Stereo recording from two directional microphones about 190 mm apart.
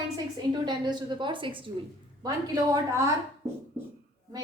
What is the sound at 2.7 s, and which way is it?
Speech, 15° right (ahead or behind).